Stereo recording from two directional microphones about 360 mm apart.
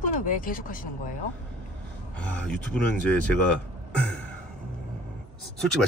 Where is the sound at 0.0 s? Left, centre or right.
Left.